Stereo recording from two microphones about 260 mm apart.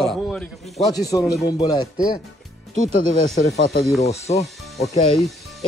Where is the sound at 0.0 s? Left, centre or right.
Centre.